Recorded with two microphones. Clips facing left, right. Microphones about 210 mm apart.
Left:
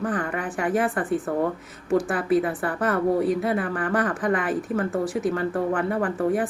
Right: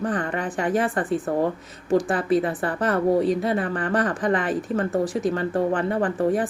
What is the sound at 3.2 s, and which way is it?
Speech, 5° left (ahead or behind).